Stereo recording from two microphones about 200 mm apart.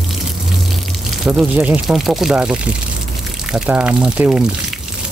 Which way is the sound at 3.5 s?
5° right (ahead or behind).